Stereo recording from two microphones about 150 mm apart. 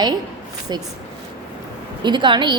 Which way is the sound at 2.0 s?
30° right (ahead or behind).